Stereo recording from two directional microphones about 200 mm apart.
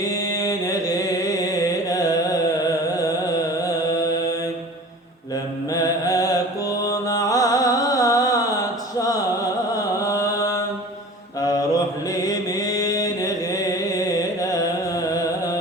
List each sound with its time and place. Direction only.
0.0 s chant: 15° left (ahead or behind)
2.9 s carnatic music: 15° left (ahead or behind)
5.7 s mantra: 15° left (ahead or behind)
6.9 s music: 15° left (ahead or behind)
11.3 s mantra: 20° left (ahead or behind)
14.4 s carnatic music: 15° left (ahead or behind)